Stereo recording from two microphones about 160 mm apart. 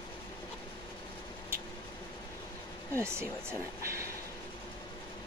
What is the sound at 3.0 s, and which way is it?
Speech, 15° right (ahead or behind).